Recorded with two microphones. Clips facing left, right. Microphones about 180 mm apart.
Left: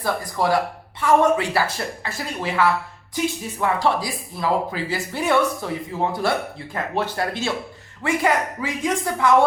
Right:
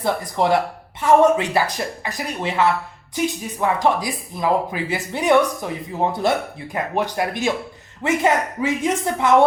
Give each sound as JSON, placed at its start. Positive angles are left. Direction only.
{"t": 0.0, "sound": "speech", "side_deg": -20}